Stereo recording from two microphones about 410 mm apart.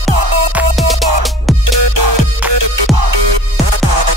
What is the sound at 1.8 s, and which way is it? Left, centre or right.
Music, right.